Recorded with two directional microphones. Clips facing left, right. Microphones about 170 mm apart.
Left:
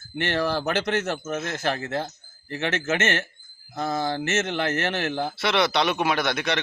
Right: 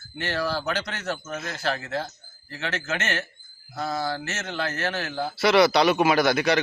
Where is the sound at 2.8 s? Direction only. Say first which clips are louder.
Left 5 dB; 20° left (ahead or behind).